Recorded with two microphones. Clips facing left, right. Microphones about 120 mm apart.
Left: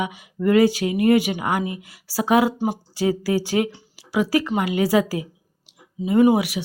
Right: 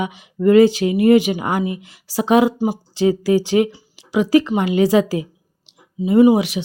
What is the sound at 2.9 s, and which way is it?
Speech, 20° right (ahead or behind).